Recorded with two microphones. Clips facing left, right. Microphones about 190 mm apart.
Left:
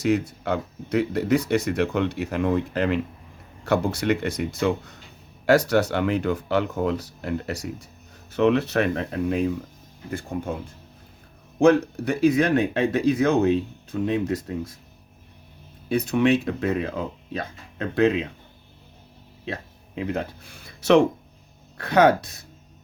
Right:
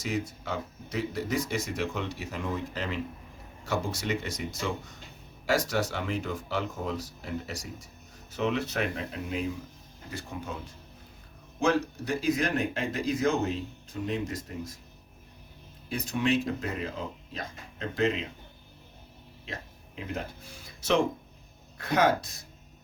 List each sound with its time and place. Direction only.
0.0 s speech: 60° left (ahead or behind)
11.6 s speech: 60° left (ahead or behind)
15.9 s speech: 65° left (ahead or behind)
20.0 s speech: 65° left (ahead or behind)